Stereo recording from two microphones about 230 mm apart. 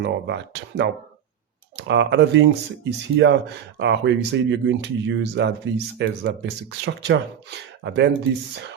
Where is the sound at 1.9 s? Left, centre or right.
Right.